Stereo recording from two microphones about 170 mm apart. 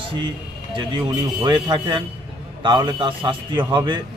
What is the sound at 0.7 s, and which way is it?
Speech, 30° right (ahead or behind).